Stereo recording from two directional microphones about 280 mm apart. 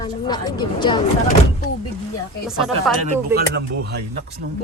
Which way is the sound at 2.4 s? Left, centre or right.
Centre.